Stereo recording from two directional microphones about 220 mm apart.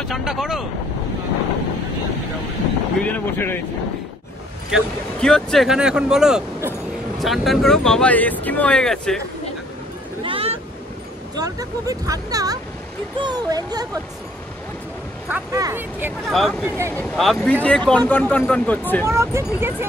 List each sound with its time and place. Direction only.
0.1 s speech: centre (ahead or behind)
3.0 s speech: 10° left (ahead or behind)
4.6 s speech: centre (ahead or behind)
10.2 s speech: 25° right (ahead or behind)
15.3 s speech: 10° right (ahead or behind)
16.3 s speech: centre (ahead or behind)
19.0 s speech: 15° right (ahead or behind)